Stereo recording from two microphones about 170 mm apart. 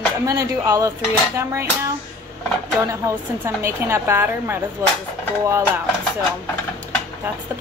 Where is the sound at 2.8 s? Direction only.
15° right (ahead or behind).